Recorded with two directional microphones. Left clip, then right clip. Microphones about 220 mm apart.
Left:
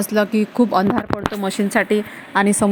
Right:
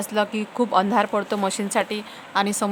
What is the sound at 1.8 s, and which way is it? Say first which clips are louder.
Speech: left 10 dB; 15° left (ahead or behind).